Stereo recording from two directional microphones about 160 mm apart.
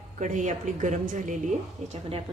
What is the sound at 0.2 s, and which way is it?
A woman's voice, 50° right (ahead or behind).